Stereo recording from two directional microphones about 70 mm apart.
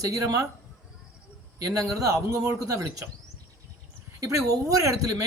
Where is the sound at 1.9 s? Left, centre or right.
Right.